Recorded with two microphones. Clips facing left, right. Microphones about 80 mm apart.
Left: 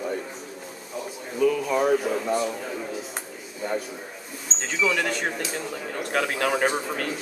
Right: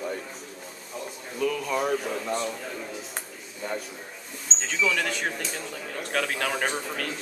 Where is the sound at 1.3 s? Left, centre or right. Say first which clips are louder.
Left 5 dB; centre.